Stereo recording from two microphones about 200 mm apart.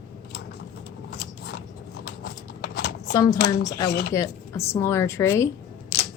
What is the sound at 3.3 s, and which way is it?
Speech, 55° left (ahead or behind).